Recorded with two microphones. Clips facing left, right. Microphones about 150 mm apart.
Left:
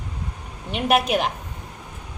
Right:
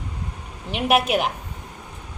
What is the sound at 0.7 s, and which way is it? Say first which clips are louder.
Speech: even; 5° right (ahead or behind).